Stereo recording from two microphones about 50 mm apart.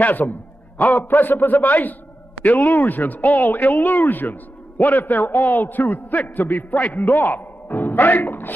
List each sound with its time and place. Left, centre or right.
0.0 s speech: left